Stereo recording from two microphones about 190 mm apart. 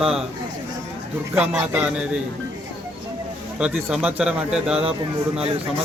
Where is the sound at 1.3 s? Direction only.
5° right (ahead or behind).